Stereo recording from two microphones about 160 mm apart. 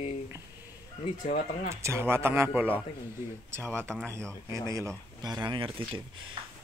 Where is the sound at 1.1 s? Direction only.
55° left (ahead or behind).